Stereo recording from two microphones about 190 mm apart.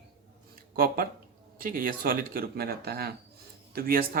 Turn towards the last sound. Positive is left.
turn(degrees=-50)  # may be behind; listen again after turning